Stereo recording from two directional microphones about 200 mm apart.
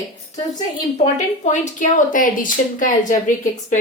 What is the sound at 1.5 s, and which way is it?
A woman's voice, 40° left (ahead or behind).